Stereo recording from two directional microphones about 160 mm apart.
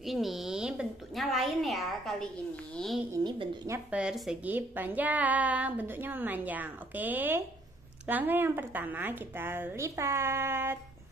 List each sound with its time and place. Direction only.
0.0 s a woman's voice: centre (ahead or behind)
3.3 s a woman's voice: 25° right (ahead or behind)
3.7 s a woman's voice: 5° right (ahead or behind)